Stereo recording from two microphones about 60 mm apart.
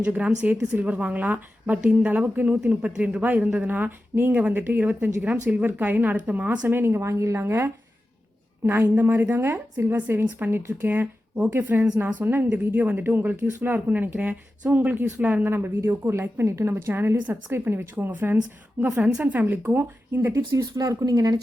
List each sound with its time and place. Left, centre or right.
0.0 s a woman's voice: right
6.7 s a woman's voice: right
18.9 s a woman's voice: centre; by 20.3 s right
20.3 s speech: right